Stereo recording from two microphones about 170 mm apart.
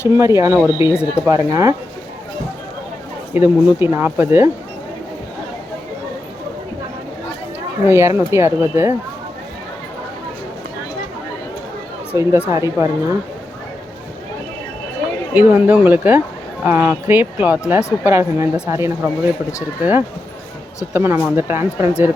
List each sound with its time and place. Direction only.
0.2 s speech: 15° right (ahead or behind)
3.3 s speech: 10° right (ahead or behind)
7.9 s speech: 15° right (ahead or behind)
12.1 s speech: 15° right (ahead or behind)
15.3 s speech: 10° right (ahead or behind)